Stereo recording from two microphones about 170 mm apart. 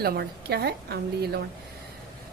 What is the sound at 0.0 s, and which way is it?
A woman's voice, 65° right (ahead or behind).